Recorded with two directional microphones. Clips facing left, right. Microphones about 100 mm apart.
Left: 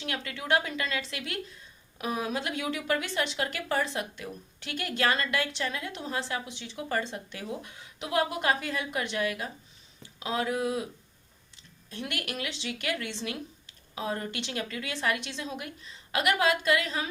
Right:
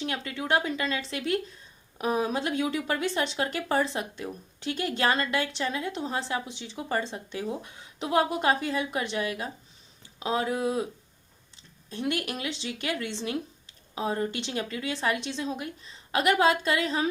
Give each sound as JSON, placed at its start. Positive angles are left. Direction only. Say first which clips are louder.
{"t": 0.0, "sound": "speech", "louder": "right 3 dB", "side_deg": -30}
{"t": 11.9, "sound": "speech", "louder": "right 6 dB", "side_deg": -30}